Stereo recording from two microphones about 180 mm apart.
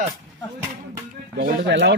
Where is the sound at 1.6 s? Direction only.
75° right (ahead or behind).